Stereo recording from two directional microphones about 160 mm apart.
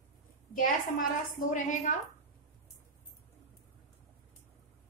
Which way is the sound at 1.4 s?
55° left (ahead or behind).